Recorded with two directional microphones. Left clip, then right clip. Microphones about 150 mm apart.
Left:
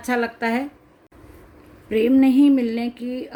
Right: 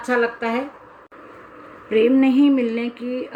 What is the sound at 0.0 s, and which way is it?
Speech, 45° left (ahead or behind).